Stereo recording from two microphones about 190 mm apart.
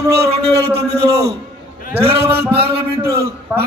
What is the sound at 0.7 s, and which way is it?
Speech, 60° right (ahead or behind).